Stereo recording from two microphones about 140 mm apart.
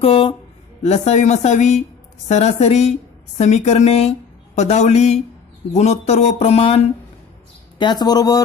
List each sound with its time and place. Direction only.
0.0 s a woman's voice: 40° left (ahead or behind)
7.8 s speech: 30° left (ahead or behind)